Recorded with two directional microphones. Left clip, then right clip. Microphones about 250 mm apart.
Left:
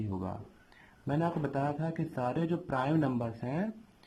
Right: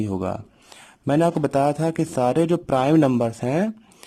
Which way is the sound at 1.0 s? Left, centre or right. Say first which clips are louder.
Right 13 dB; right.